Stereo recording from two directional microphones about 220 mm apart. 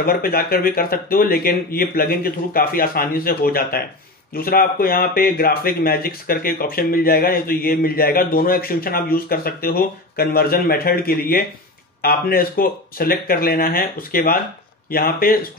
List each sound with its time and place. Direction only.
0.0 s a man's voice: 40° left (ahead or behind)